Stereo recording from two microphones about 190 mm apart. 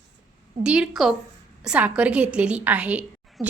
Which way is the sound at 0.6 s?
5° right (ahead or behind).